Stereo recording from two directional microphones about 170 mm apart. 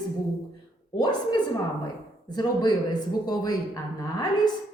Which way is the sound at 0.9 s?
25° left (ahead or behind).